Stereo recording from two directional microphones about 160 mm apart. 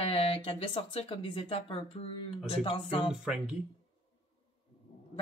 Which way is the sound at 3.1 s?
5° right (ahead or behind).